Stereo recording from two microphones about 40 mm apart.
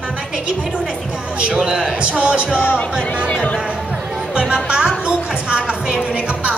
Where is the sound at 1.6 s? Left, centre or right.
Centre.